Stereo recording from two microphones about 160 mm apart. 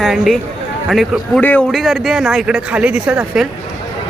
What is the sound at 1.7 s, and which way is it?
Speech, centre (ahead or behind).